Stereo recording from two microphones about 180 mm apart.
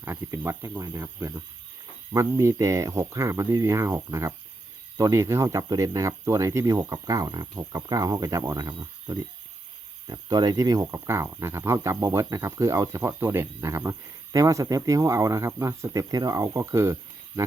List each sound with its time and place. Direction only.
0.0 s speech: 15° right (ahead or behind)